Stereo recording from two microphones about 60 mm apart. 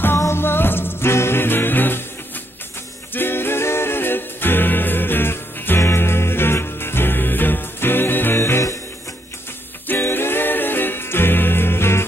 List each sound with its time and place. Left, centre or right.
0.3 s music: left
3.2 s music: left
9.9 s music: left